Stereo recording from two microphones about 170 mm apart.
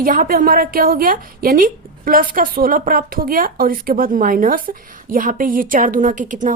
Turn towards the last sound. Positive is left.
turn(degrees=-50)  # may be behind; listen again after turning